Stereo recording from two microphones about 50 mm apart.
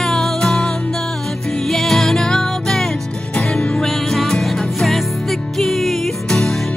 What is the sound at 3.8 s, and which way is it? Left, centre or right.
Music, centre.